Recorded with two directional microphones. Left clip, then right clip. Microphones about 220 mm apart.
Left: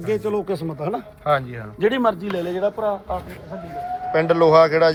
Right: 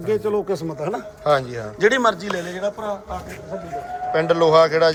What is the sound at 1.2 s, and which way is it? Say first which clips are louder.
Speech: right 2 dB; 10° right (ahead or behind).